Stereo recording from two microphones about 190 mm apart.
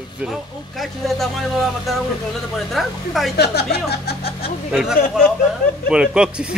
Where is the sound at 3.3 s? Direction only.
60° left (ahead or behind).